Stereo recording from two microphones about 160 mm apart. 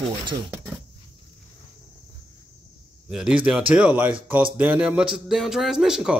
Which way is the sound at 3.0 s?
5° right (ahead or behind).